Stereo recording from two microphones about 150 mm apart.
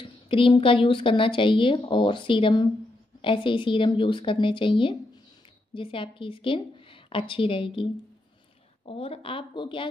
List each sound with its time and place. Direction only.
0.0 s speech: 35° left (ahead or behind)